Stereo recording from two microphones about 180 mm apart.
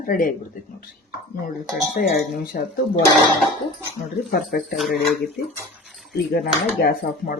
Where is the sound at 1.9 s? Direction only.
55° left (ahead or behind).